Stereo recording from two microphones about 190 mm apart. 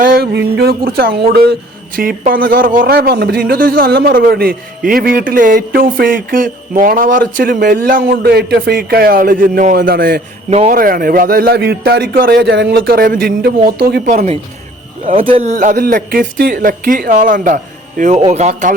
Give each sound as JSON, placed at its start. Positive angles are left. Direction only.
{"t": 0.0, "sound": "a sound", "side_deg": -50}
{"t": 0.9, "sound": "speech", "side_deg": -50}
{"t": 10.5, "sound": "speech", "side_deg": -35}
{"t": 10.8, "sound": "speech", "side_deg": -50}
{"t": 15.3, "sound": "speech", "side_deg": -35}